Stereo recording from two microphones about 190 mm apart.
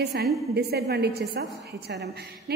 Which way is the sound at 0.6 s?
60° right (ahead or behind).